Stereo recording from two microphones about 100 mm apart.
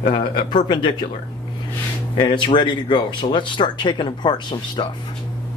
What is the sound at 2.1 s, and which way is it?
Speech, 55° left (ahead or behind).